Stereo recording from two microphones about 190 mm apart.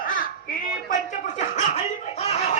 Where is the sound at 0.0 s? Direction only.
45° left (ahead or behind).